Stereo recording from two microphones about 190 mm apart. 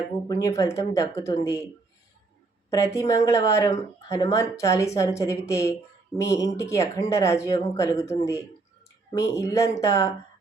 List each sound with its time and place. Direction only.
0.3 s speech: 20° left (ahead or behind)
2.6 s speech: 15° left (ahead or behind)